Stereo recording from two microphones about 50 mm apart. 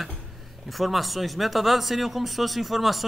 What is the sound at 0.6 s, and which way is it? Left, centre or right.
A man's voice, centre.